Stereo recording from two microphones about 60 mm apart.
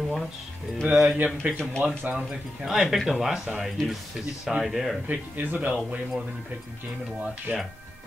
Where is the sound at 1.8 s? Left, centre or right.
Right.